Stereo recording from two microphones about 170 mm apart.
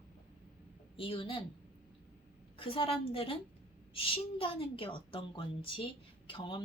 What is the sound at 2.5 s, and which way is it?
A woman's voice, 30° left (ahead or behind).